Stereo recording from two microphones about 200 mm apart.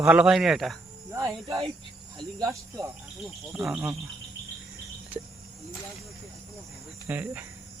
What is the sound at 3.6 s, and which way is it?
Speech, 5° right (ahead or behind).